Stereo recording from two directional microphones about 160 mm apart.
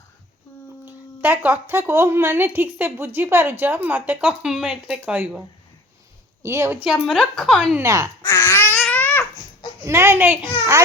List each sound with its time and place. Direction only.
0.9 s speech: 10° right (ahead or behind)
6.4 s speech: 15° right (ahead or behind)
6.8 s a woman's voice: centre (ahead or behind)
7.8 s speech: 20° right (ahead or behind)
8.2 s babbling: 15° left (ahead or behind)
9.8 s speech: 15° right (ahead or behind)